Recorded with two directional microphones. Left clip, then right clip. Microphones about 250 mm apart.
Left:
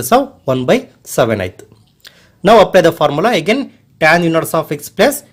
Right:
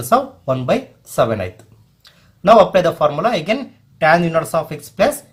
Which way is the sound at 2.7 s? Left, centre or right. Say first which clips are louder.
Left 4 dB; left.